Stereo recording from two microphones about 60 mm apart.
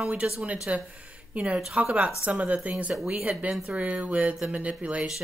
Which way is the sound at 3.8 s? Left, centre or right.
Right.